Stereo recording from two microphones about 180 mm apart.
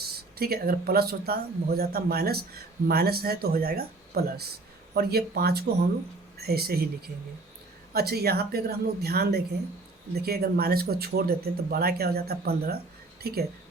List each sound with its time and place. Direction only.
0.0 s speech: 60° right (ahead or behind)